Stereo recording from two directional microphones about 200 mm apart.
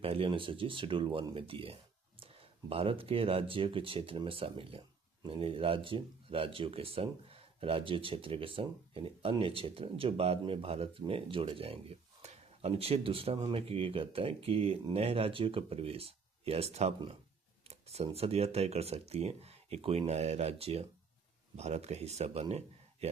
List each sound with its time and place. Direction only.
0.0 s a man's voice: 30° right (ahead or behind)